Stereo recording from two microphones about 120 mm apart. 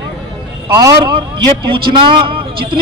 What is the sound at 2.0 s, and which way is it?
Speech, 45° right (ahead or behind).